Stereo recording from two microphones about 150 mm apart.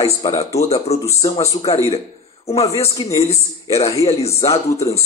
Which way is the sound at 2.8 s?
25° left (ahead or behind).